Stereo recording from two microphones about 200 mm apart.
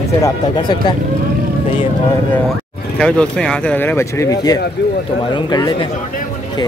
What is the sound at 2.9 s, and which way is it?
Speech, 5° left (ahead or behind).